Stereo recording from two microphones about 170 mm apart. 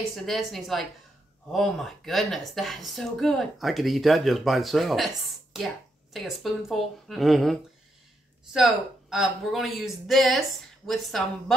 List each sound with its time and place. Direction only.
0.1 s speech: centre (ahead or behind)
8.5 s speech: centre (ahead or behind)